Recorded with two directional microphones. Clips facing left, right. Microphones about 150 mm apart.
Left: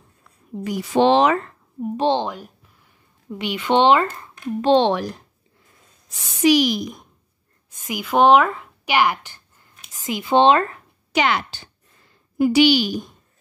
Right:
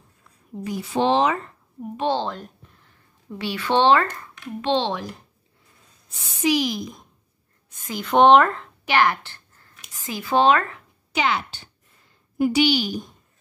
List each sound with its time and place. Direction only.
0.7 s speech: 90° left
2.0 s speech: 15° left (ahead or behind)
3.3 s a woman's voice: 20° left (ahead or behind)
4.7 s a woman's voice: 65° left (ahead or behind)
7.8 s a woman's voice: 5° left (ahead or behind); by 10.8 s 30° left (ahead or behind)
11.1 s a woman's voice: 75° left (ahead or behind); by 13.0 s 90° left